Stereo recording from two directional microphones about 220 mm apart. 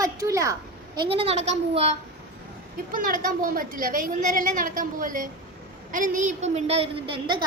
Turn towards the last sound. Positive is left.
turn(degrees=-20)  # may be behind; listen again after turning